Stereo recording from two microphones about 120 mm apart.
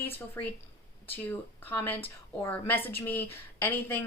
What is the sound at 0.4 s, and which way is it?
A woman's voice, 20° left (ahead or behind).